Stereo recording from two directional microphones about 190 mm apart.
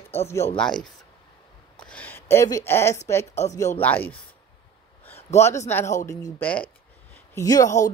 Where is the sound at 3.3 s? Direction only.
35° left (ahead or behind).